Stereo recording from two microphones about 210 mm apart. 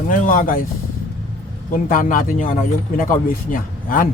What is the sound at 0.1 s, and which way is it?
Speech, 40° left (ahead or behind).